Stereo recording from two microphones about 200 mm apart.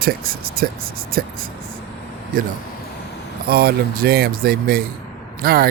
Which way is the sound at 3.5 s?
50° right (ahead or behind).